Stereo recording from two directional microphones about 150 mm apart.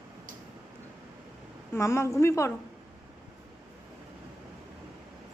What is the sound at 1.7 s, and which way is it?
Speech, 20° left (ahead or behind).